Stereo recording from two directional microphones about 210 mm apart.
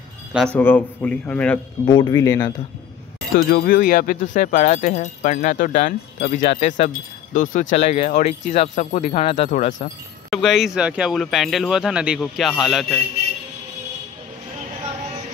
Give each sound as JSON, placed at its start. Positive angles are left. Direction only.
{"t": 0.3, "sound": "speech", "side_deg": 0}
{"t": 1.9, "sound": "speech", "side_deg": 20}
{"t": 3.3, "sound": "speech", "side_deg": 40}
{"t": 10.3, "sound": "speech", "side_deg": 0}